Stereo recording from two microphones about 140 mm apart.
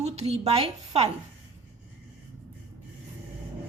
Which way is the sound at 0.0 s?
50° right (ahead or behind).